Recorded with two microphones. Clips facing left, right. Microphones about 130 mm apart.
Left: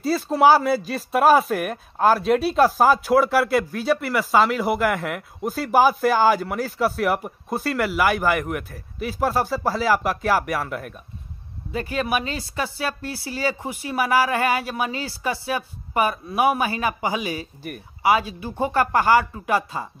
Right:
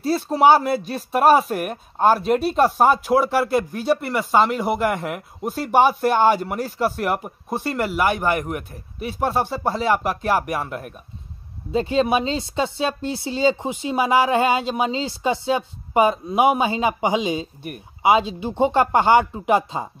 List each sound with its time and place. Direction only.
0.0 s speech: centre (ahead or behind)
11.7 s speech: 25° right (ahead or behind)